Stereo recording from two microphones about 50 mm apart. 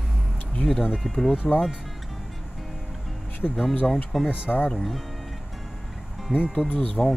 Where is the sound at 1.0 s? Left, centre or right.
Centre.